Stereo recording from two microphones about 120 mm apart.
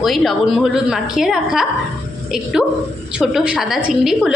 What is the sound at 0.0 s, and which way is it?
A woman's voice, centre (ahead or behind).